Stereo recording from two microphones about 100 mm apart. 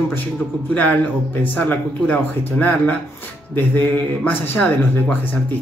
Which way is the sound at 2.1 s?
15° left (ahead or behind).